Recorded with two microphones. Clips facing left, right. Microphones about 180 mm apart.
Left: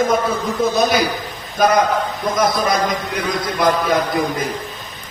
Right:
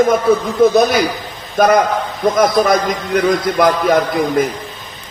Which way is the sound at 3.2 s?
55° right (ahead or behind).